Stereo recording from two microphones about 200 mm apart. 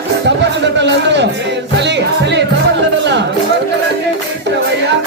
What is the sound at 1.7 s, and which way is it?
Music, 60° right (ahead or behind).